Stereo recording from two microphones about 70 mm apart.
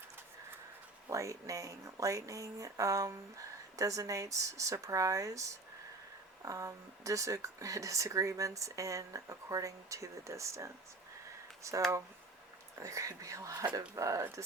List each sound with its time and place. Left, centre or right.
1.0 s speech: right